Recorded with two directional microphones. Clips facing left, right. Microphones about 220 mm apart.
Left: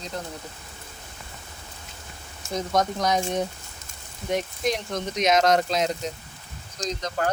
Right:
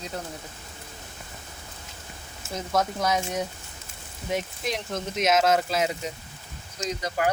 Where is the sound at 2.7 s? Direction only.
5° right (ahead or behind).